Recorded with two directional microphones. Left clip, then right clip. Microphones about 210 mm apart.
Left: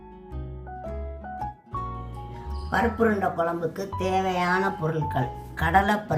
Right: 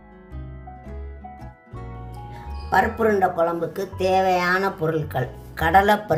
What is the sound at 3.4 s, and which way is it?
Speech, 55° right (ahead or behind).